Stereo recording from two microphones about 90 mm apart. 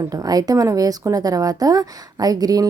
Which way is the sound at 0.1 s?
45° right (ahead or behind).